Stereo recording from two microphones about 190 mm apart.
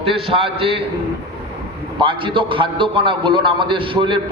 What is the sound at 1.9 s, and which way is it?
A man's voice, 25° right (ahead or behind).